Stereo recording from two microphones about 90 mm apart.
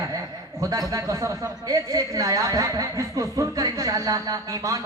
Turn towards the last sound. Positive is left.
turn(degrees=-40)  # may be behind; listen again after turning